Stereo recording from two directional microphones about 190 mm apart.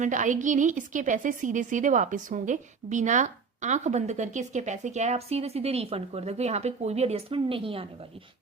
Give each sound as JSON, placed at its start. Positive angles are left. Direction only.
{"t": 0.0, "sound": "a woman's voice", "side_deg": -40}